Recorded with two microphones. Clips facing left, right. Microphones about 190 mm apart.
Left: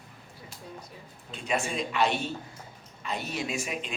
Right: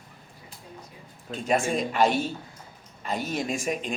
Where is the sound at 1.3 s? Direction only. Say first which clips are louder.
Right 6 dB; 45° right (ahead or behind).